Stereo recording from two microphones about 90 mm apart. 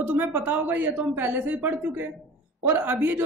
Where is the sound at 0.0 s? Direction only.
20° right (ahead or behind).